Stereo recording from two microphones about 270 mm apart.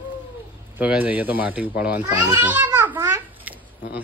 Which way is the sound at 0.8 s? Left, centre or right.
Centre.